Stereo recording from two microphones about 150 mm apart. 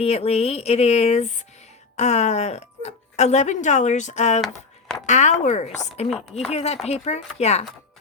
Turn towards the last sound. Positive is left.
turn(degrees=45)  # may be behind; listen again after turning